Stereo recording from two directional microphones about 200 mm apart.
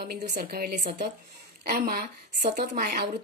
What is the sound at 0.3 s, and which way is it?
A woman's voice, 50° right (ahead or behind).